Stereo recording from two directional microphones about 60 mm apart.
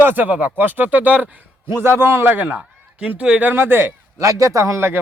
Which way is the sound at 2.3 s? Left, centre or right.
Right.